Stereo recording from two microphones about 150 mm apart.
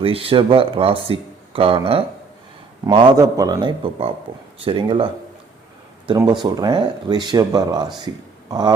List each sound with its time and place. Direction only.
0.0 s speech: 40° right (ahead or behind)